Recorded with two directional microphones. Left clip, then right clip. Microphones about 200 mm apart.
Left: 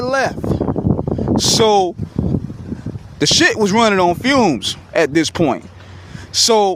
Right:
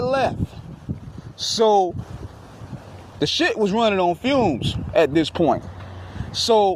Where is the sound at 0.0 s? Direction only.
35° left (ahead or behind).